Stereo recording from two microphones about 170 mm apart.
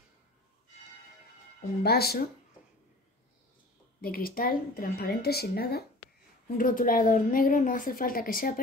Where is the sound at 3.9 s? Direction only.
60° left (ahead or behind).